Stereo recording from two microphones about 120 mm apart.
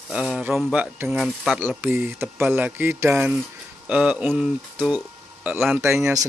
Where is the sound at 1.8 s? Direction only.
15° right (ahead or behind).